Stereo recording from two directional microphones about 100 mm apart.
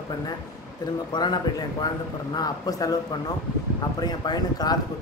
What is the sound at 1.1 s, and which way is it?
Speech, 45° left (ahead or behind).